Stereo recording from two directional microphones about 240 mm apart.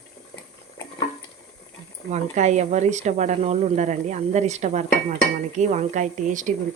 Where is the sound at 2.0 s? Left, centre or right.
Right.